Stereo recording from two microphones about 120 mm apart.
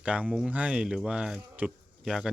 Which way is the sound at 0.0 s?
10° right (ahead or behind).